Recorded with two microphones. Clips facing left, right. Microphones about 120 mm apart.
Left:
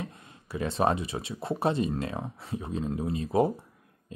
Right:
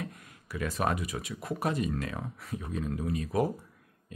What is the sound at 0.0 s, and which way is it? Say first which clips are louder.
Speech: left 1 dB; 25° left (ahead or behind).